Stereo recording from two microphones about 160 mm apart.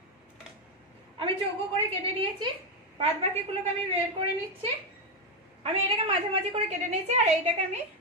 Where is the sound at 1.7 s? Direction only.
35° right (ahead or behind).